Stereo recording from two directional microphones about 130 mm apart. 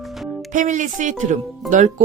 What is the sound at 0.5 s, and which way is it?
Speech, 75° right (ahead or behind).